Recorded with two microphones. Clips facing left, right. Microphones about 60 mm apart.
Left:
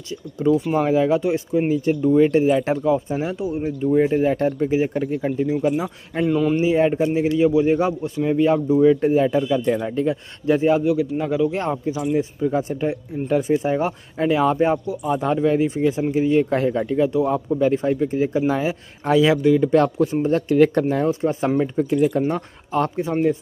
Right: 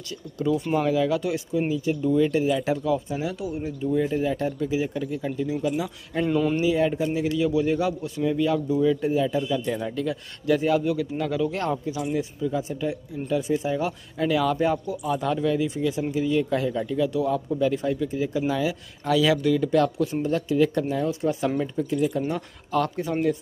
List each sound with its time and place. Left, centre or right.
0.4 s speech: left
6.2 s speech: centre
6.6 s speech: left
10.8 s speech: centre
19.7 s speech: left
20.5 s speech: left
20.9 s speech: left
21.7 s speech: left
22.7 s speech: left